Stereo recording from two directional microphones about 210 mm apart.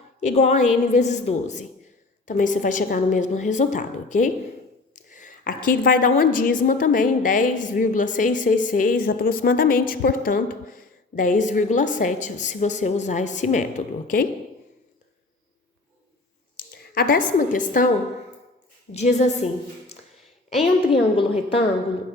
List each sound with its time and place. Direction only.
0.2 s a woman's voice: 35° left (ahead or behind)
16.6 s a woman's voice: 45° left (ahead or behind)
18.9 s a woman's voice: 35° left (ahead or behind)
21.2 s a woman's voice: 25° left (ahead or behind)